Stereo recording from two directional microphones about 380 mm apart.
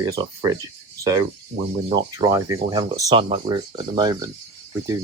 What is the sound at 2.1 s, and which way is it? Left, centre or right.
Speech, centre.